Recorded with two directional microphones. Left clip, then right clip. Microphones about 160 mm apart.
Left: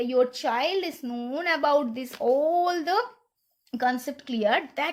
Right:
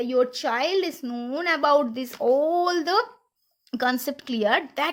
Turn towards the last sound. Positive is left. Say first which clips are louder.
# right 2 dB
turn(degrees=-15)  # may be behind; listen again after turning